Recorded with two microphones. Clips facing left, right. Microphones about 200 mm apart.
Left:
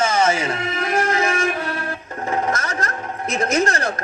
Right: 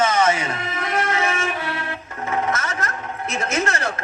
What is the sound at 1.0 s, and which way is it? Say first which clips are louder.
Music: left 3 dB; 35° left (ahead or behind).